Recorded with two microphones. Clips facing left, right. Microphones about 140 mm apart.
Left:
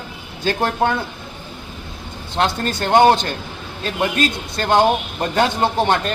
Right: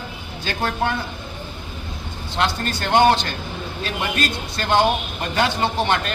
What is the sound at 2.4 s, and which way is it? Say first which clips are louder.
Speech: left 3 dB; 40° left (ahead or behind).